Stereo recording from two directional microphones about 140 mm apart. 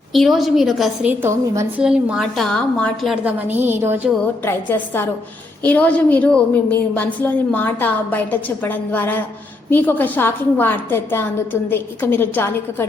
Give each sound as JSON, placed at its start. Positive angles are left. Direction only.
{"t": 0.1, "sound": "a woman's voice", "side_deg": 0}
{"t": 3.2, "sound": "a woman's voice", "side_deg": -15}
{"t": 4.4, "sound": "a woman's voice", "side_deg": 15}